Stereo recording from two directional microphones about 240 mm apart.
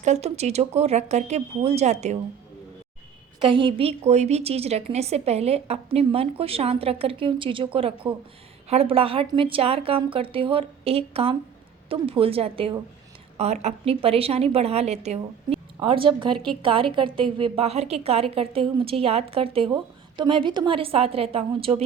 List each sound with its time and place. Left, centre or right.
0.0 s a woman's voice: right
3.4 s a woman's voice: right